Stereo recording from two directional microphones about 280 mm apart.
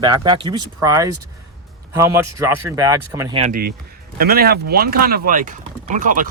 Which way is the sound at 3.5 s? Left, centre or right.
Right.